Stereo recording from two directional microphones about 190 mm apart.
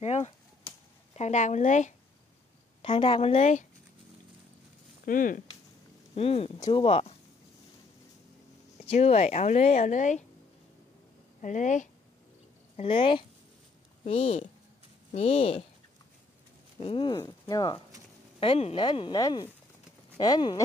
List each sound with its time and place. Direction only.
0.0 s a sound: 35° left (ahead or behind)
1.1 s a woman's voice: 35° left (ahead or behind)
2.8 s speech: 30° left (ahead or behind)
5.0 s speech: 45° left (ahead or behind)
6.1 s a woman's voice: 30° left (ahead or behind)
8.8 s a woman's voice: 35° left (ahead or behind)
11.4 s a woman's voice: 40° left (ahead or behind)
12.7 s a woman's voice: 30° left (ahead or behind)
16.8 s speech: 25° left (ahead or behind)